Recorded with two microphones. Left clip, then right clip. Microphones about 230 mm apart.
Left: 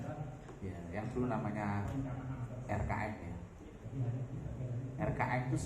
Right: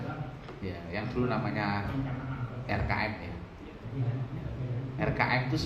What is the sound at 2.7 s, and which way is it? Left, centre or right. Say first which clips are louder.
Speech: right 7 dB; right.